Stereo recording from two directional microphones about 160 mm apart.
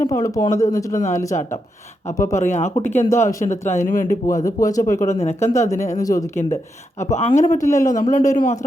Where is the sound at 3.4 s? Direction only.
50° left (ahead or behind).